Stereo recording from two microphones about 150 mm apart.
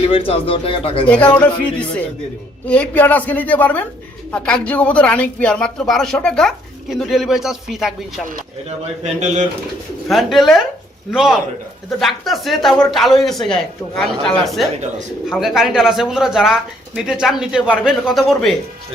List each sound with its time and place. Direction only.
0.1 s speech: 40° left (ahead or behind)
1.0 s a woman's voice: 10° left (ahead or behind)
10.1 s speech: centre (ahead or behind)